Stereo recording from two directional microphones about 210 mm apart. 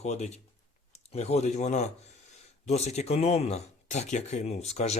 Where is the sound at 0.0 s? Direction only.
30° left (ahead or behind).